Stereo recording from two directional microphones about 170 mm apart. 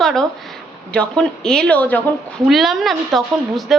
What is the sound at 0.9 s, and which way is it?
A woman's voice, 5° left (ahead or behind).